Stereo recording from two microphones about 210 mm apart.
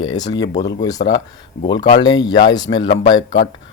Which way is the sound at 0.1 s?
20° left (ahead or behind).